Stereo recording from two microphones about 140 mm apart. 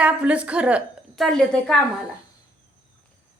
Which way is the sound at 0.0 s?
10° right (ahead or behind).